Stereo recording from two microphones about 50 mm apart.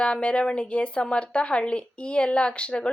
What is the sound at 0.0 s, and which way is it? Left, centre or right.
Speech, left.